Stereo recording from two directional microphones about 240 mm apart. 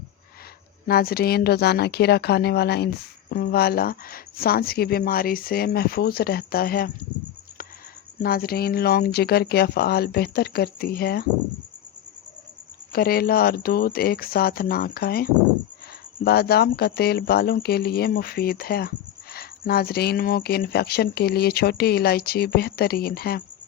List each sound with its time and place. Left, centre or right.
0.9 s speech: left
8.2 s speech: left
12.9 s speech: left